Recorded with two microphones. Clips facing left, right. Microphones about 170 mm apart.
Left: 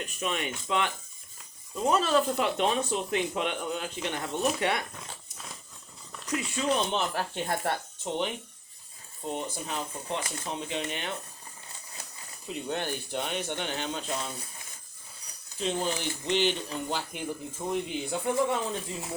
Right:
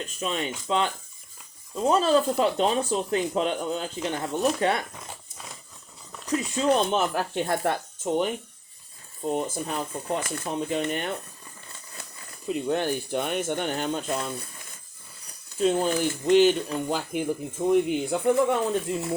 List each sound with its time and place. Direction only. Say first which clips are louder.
0.2 s speech: right 3 dB; 30° right (ahead or behind)
6.2 s speech: right 5 dB; 35° right (ahead or behind)
6.7 s speech: right 6 dB; 50° right (ahead or behind)
12.5 s speech: right 7 dB; 50° right (ahead or behind)
15.5 s speech: right 7 dB; 50° right (ahead or behind)